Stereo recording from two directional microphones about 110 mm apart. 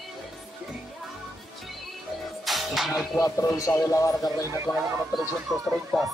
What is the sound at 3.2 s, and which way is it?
Speech, 30° left (ahead or behind).